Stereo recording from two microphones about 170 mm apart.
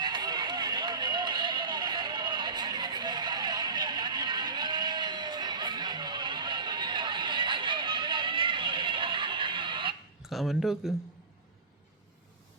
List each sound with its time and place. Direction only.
0.0 s music: 25° right (ahead or behind)
10.2 s speech: centre (ahead or behind)